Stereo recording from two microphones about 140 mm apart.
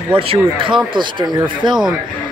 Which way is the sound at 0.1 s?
40° right (ahead or behind).